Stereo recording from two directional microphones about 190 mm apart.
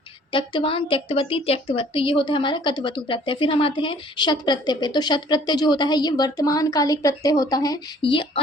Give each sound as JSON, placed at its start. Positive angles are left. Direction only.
{"t": 0.3, "sound": "a woman's voice", "side_deg": 25}